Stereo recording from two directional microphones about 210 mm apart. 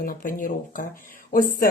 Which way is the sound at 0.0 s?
40° left (ahead or behind).